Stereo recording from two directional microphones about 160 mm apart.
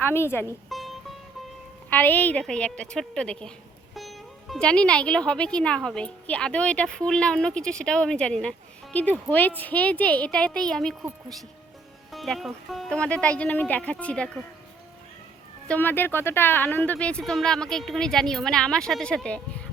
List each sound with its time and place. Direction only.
0.0 s speech: 15° left (ahead or behind)
0.7 s music: centre (ahead or behind)
1.9 s speech: 10° left (ahead or behind)
12.1 s speech: centre (ahead or behind)
15.6 s speech: 10° left (ahead or behind)